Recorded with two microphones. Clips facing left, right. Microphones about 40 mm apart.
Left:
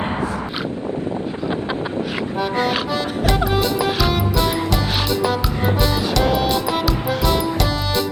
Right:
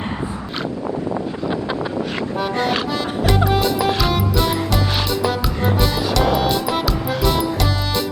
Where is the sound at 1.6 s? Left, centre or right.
Centre.